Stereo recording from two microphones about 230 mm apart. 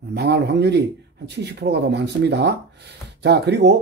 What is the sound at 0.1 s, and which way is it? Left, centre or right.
Speech, right.